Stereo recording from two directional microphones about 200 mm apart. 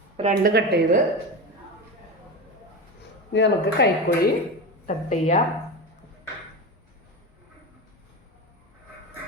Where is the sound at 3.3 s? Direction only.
60° left (ahead or behind).